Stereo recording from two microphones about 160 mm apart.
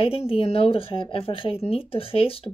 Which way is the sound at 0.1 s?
35° left (ahead or behind).